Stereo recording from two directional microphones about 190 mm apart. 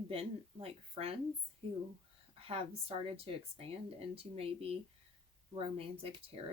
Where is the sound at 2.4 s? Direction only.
30° right (ahead or behind).